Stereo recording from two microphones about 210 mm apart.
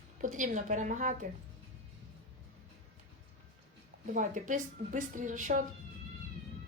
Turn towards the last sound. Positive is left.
turn(degrees=-40)  # may be behind; listen again after turning